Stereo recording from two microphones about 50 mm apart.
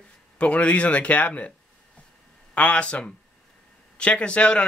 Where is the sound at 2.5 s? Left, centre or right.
Left.